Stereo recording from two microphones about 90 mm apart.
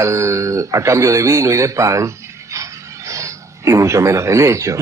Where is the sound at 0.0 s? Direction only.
35° right (ahead or behind).